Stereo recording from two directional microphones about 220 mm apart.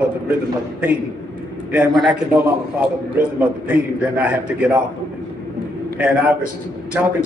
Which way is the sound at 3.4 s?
5° right (ahead or behind).